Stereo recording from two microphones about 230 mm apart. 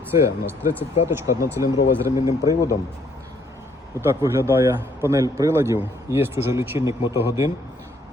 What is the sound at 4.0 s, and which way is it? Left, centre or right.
A man's voice, centre.